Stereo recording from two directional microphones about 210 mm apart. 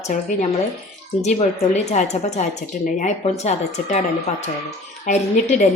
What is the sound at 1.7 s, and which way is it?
A woman's voice, 30° left (ahead or behind).